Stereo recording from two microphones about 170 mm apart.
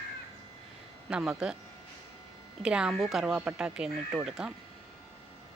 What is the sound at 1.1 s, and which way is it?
Speech, 5° right (ahead or behind).